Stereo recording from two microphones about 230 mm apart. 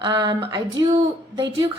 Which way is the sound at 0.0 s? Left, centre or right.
Centre.